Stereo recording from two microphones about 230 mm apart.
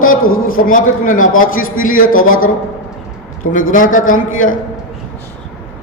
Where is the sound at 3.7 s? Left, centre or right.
Left.